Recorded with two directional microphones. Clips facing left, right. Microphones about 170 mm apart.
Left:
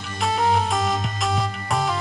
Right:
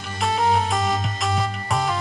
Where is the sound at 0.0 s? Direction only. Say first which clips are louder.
Even; centre (ahead or behind).